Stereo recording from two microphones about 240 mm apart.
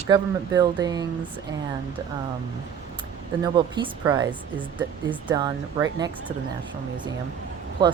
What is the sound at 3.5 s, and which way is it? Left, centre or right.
Speech, centre.